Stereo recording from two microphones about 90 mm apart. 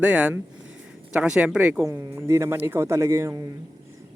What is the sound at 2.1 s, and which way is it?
Speech, 25° right (ahead or behind).